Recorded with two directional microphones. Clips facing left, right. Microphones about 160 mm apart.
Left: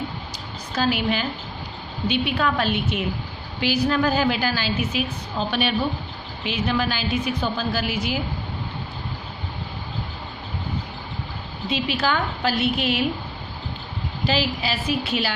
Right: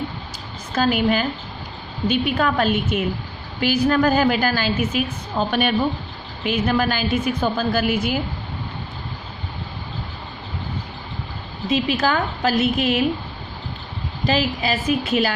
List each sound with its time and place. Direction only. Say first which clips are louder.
0.7 s a woman's voice: right 4 dB; 50° right (ahead or behind)
11.7 s a woman's voice: right 4 dB; 45° right (ahead or behind)
14.3 s a woman's voice: right 3 dB; 45° right (ahead or behind)